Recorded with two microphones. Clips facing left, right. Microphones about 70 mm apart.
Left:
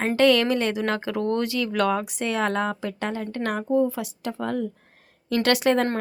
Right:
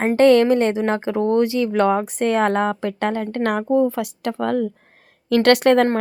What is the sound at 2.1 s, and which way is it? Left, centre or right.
Speech, right.